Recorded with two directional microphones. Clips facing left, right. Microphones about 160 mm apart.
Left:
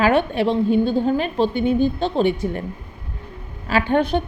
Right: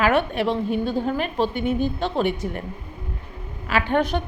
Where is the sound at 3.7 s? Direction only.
35° left (ahead or behind).